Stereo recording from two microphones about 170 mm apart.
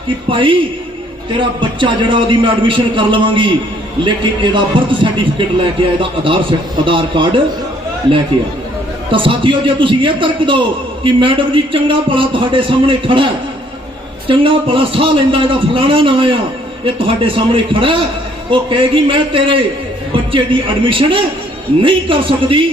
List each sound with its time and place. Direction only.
0.3 s a man's voice: 30° right (ahead or behind)
9.1 s a man's voice: 30° right (ahead or behind)
14.3 s a man's voice: 30° right (ahead or behind)